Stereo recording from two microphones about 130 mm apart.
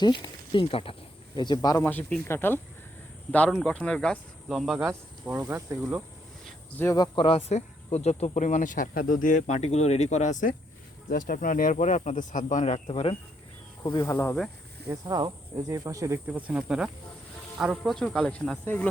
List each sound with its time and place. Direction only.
0.0 s speech: 35° left (ahead or behind)
1.5 s speech: 25° left (ahead or behind)
1.9 s speech: 10° left (ahead or behind)
3.5 s speech: 5° left (ahead or behind)
5.5 s speech: 20° right (ahead or behind)
6.9 s speech: 30° left (ahead or behind)
7.3 s speech: 50° left (ahead or behind); by 10.5 s 70° left (ahead or behind)
11.2 s speech: 90° left; by 13.1 s 50° left (ahead or behind)
13.8 s speech: 25° left (ahead or behind)
15.0 s speech: 35° right (ahead or behind); by 18.9 s 15° left (ahead or behind)